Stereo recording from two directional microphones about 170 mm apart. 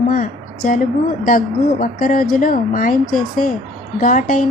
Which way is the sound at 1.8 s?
55° left (ahead or behind).